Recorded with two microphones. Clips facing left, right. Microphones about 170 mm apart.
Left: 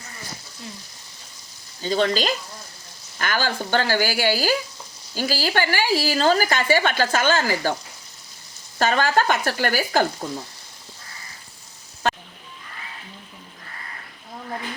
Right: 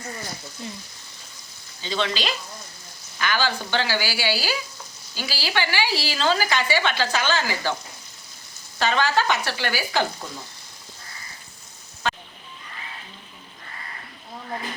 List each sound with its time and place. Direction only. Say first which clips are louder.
1.8 s speech: left 5 dB; 45° left (ahead or behind)
8.8 s speech: left 2 dB; 45° left (ahead or behind)
12.0 s a sound: left 4 dB; 45° left (ahead or behind)